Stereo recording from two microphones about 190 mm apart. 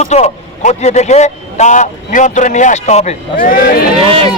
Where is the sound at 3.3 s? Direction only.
45° left (ahead or behind).